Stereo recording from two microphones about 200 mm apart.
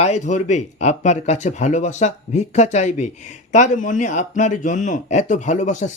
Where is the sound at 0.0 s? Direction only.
35° left (ahead or behind).